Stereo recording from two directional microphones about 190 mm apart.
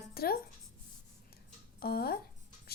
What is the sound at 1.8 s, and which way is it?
Speech, 55° left (ahead or behind).